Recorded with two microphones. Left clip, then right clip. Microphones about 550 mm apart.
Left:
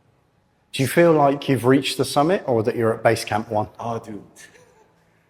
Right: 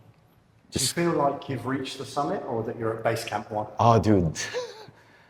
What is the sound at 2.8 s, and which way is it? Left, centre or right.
Speech, left.